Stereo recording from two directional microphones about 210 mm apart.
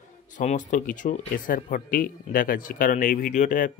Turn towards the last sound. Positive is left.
turn(degrees=40)  # may be behind; listen again after turning